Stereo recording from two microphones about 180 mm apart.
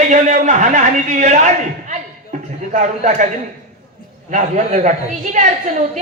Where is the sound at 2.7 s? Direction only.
40° right (ahead or behind).